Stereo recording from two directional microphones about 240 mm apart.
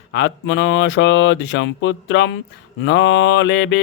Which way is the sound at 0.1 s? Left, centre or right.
Left.